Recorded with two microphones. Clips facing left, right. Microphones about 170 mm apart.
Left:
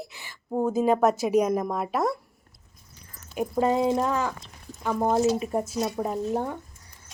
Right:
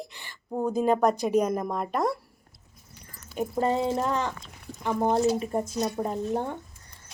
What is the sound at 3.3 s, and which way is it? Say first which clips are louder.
Speech: left 2 dB; 10° left (ahead or behind).